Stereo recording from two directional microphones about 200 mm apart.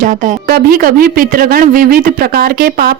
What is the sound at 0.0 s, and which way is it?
Speech, 45° right (ahead or behind).